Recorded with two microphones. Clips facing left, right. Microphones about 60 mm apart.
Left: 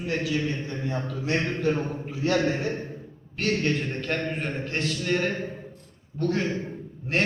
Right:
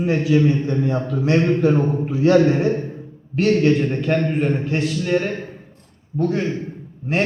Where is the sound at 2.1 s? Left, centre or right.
Right.